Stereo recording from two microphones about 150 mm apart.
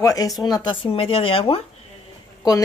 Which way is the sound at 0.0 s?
25° left (ahead or behind).